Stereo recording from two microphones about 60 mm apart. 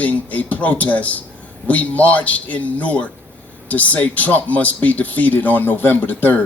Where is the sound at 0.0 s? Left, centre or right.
Left.